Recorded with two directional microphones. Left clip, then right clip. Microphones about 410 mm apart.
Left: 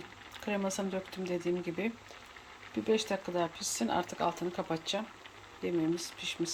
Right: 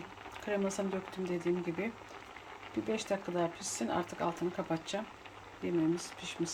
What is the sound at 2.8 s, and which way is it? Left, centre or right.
Speech, centre.